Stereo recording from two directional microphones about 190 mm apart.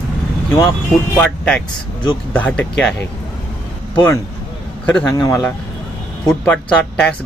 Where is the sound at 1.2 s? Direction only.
5° left (ahead or behind).